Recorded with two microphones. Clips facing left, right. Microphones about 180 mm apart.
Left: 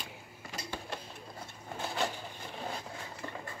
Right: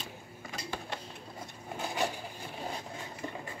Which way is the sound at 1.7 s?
15° right (ahead or behind).